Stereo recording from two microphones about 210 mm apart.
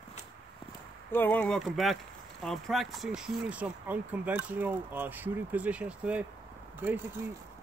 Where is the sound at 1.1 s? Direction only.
10° left (ahead or behind).